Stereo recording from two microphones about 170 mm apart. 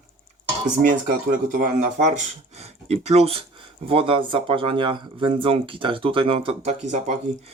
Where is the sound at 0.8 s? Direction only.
50° right (ahead or behind).